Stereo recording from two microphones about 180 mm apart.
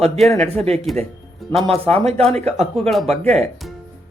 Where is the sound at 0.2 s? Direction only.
Centre (ahead or behind).